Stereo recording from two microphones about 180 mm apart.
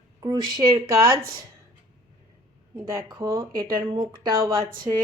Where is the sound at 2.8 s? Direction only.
15° right (ahead or behind).